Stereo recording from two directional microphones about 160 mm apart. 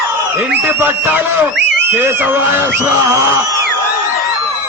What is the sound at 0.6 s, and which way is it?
A man's voice, 15° right (ahead or behind).